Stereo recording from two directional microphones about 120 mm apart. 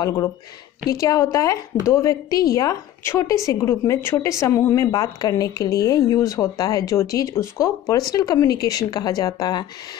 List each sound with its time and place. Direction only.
0.8 s a woman's voice: 30° left (ahead or behind)